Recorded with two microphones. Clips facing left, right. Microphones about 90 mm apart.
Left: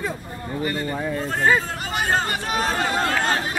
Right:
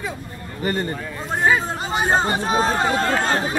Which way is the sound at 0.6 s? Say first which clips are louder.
Right 3 dB; 35° right (ahead or behind).